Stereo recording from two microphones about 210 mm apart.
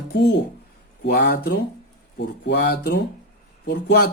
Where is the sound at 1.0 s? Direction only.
50° left (ahead or behind).